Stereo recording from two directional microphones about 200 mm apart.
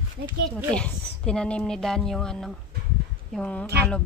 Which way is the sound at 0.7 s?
5° left (ahead or behind).